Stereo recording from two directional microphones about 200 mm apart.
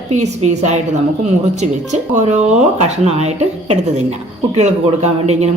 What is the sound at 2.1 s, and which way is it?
A man's voice, 35° right (ahead or behind).